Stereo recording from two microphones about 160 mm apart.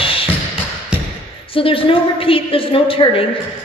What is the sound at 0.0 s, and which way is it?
Music, 35° left (ahead or behind).